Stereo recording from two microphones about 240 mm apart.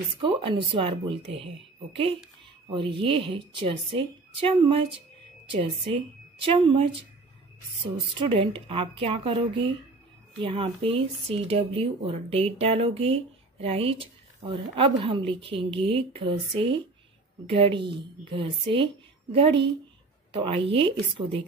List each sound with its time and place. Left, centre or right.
0.2 s speech: right